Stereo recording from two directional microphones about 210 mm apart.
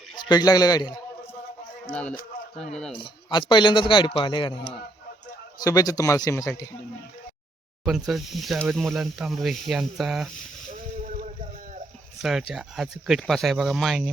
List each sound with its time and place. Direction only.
0.3 s speech: 20° left (ahead or behind)
1.9 s speech: 5° left (ahead or behind)
2.9 s a man's voice: 20° left (ahead or behind)
7.9 s speech: centre (ahead or behind)
11.0 s boat: 40° right (ahead or behind)
12.2 s speech: centre (ahead or behind)